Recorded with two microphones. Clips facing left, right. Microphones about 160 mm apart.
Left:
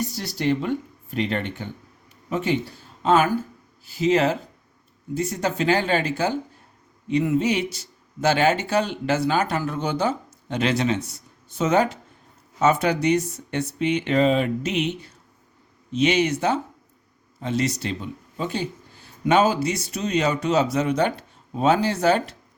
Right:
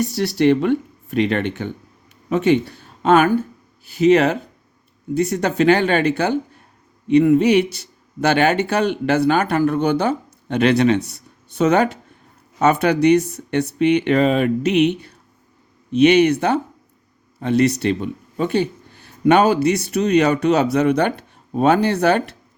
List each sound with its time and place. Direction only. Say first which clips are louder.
0.0 s speech: right 9 dB; 70° right (ahead or behind)